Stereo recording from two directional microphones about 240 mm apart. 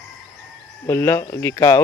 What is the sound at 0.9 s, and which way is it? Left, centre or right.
Speech, centre.